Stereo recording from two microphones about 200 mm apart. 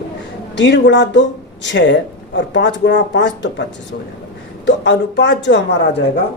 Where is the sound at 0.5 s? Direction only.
60° left (ahead or behind).